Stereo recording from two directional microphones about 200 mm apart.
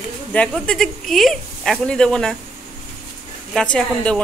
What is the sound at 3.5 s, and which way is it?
Speech, 5° left (ahead or behind).